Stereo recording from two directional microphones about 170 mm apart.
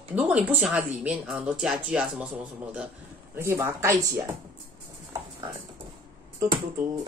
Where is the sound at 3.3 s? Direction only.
15° right (ahead or behind).